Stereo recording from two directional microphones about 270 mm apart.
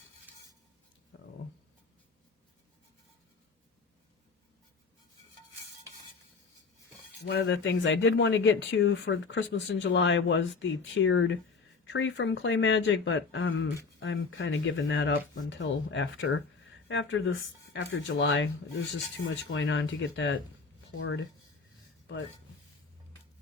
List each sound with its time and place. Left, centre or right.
0.3 s dishes: centre
7.2 s speech: left